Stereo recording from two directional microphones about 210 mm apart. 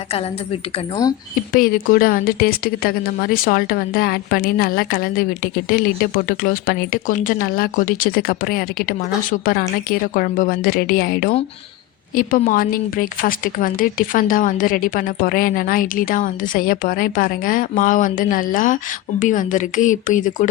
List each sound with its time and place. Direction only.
1.5 s a woman's voice: 45° left (ahead or behind)